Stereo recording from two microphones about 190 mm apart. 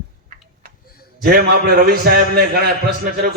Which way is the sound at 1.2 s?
50° right (ahead or behind).